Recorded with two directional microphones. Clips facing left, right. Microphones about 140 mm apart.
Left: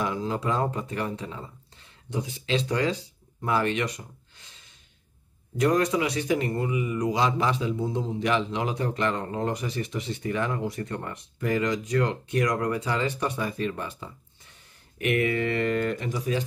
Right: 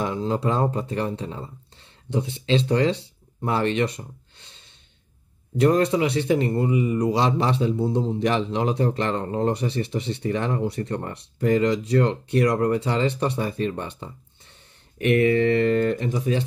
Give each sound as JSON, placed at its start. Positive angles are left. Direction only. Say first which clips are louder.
{"t": 0.0, "sound": "a man's voice", "louder": "right 4 dB", "side_deg": -30}